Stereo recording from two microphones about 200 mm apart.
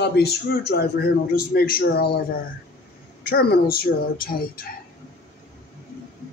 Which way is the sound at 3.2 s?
50° left (ahead or behind).